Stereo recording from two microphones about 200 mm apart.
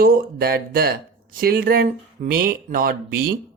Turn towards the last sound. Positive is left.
turn(degrees=-45)  # may be behind; listen again after turning